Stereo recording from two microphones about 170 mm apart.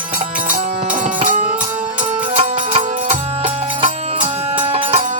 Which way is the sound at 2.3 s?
45° right (ahead or behind).